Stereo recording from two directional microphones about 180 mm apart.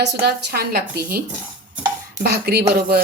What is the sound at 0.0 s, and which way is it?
Speech, 65° right (ahead or behind).